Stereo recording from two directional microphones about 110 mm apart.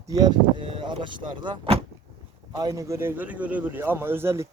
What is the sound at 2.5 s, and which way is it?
Speech, 35° right (ahead or behind).